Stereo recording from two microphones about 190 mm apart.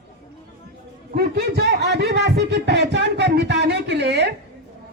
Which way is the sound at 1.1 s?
55° right (ahead or behind).